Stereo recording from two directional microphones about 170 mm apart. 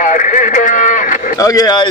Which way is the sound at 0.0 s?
50° left (ahead or behind).